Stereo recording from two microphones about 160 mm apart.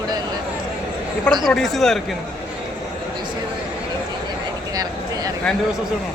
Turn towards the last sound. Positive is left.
turn(degrees=-20)  # may be behind; listen again after turning